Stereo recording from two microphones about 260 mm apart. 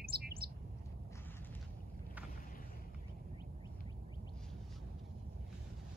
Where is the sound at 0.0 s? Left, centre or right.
Right.